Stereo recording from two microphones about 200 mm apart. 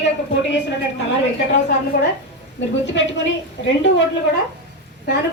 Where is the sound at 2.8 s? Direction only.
65° left (ahead or behind).